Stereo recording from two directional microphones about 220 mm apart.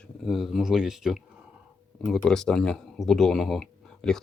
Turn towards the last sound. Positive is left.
turn(degrees=0)  # may be behind; listen again after turning